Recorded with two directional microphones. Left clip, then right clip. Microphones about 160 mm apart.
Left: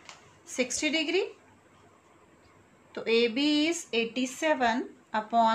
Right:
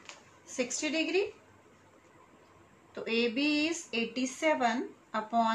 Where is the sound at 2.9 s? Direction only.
55° left (ahead or behind).